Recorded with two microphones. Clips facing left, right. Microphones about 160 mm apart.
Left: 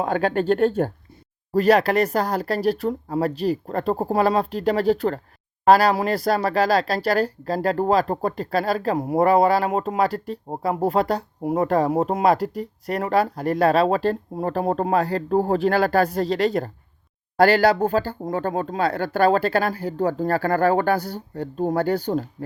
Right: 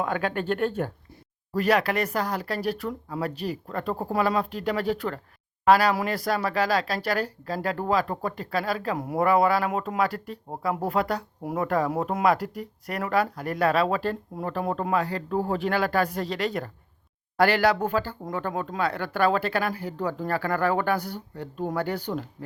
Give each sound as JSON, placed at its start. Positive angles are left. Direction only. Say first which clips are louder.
{"t": 0.0, "sound": "speech", "louder": "left 6 dB", "side_deg": 35}